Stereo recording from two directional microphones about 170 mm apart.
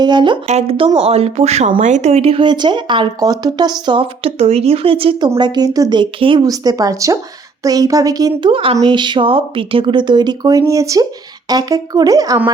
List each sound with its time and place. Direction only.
0.0 s speech: 25° right (ahead or behind)
0.4 s speech: 35° right (ahead or behind); by 12.4 s 20° right (ahead or behind)